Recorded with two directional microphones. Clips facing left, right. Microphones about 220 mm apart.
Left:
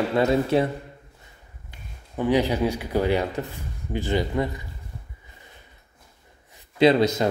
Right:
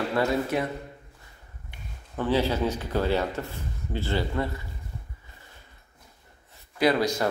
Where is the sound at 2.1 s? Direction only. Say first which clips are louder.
Left 3 dB; 15° left (ahead or behind).